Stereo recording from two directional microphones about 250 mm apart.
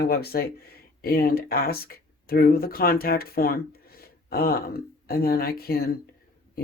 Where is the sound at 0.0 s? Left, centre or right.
Left.